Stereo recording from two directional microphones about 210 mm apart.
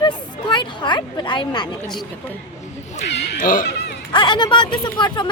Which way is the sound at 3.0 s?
55° left (ahead or behind).